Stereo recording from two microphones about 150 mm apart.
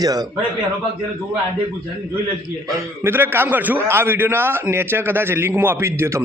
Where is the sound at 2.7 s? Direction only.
15° right (ahead or behind).